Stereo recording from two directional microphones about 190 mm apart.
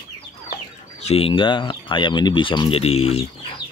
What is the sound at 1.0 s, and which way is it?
Speech, 30° left (ahead or behind).